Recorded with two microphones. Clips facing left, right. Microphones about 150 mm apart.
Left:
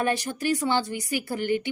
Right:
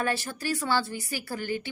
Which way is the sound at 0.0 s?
20° left (ahead or behind).